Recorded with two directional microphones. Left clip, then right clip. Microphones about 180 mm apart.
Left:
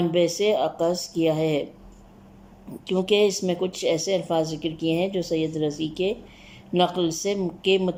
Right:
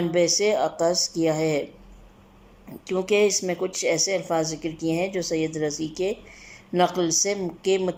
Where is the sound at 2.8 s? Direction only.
10° left (ahead or behind).